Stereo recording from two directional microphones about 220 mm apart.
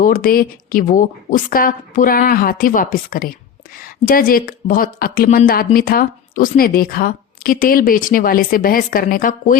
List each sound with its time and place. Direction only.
0.0 s speech: 40° left (ahead or behind)